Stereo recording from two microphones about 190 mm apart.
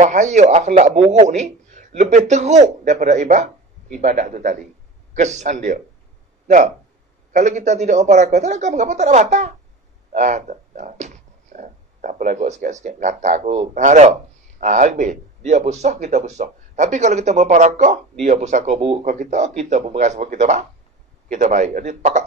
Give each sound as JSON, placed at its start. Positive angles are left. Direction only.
{"t": 0.0, "sound": "speech", "side_deg": -40}